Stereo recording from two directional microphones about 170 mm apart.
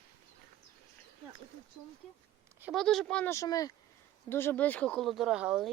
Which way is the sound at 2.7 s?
Centre (ahead or behind).